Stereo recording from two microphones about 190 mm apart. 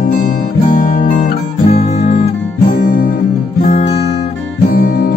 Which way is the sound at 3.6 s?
35° left (ahead or behind).